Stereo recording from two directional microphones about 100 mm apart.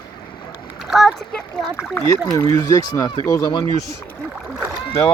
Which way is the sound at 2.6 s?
35° left (ahead or behind).